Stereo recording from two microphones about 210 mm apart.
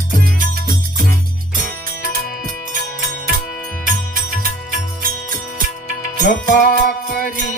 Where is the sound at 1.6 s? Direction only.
45° right (ahead or behind).